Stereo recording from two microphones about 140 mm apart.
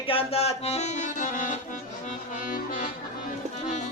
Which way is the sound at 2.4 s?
75° left (ahead or behind).